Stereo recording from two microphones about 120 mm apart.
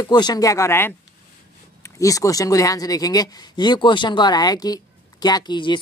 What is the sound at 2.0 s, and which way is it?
Speech, 30° left (ahead or behind).